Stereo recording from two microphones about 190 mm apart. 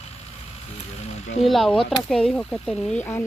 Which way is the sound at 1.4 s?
Centre (ahead or behind).